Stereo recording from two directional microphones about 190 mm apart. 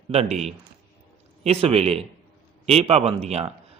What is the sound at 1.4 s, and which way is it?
A man's voice, 30° right (ahead or behind).